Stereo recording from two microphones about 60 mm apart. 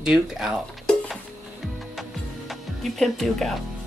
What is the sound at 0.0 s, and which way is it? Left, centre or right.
Speech, centre.